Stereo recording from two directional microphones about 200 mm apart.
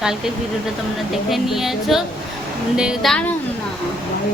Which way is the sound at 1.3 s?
Centre (ahead or behind).